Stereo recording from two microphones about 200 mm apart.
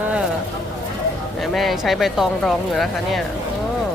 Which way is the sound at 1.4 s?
Centre (ahead or behind).